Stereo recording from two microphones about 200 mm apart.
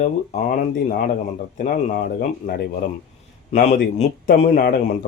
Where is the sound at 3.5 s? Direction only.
35° left (ahead or behind).